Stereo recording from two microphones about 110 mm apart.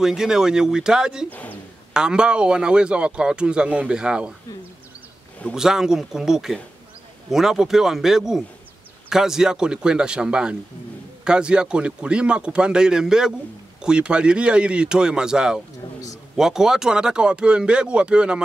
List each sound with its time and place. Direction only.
0.0 s a man's voice: 5° right (ahead or behind)
1.3 s speech: 15° left (ahead or behind)
2.0 s a man's voice: 10° right (ahead or behind)
5.5 s a man's voice: 5° right (ahead or behind)